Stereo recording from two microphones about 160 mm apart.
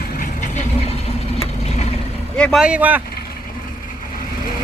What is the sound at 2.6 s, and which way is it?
Speech, 10° right (ahead or behind).